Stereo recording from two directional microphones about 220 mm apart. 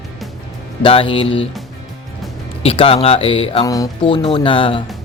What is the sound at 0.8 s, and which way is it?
Speech, 25° left (ahead or behind).